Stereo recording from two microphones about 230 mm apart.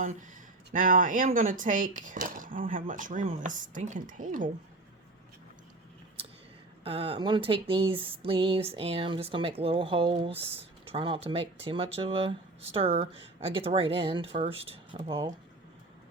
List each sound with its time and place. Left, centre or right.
0.0 s speech: right
6.8 s speech: right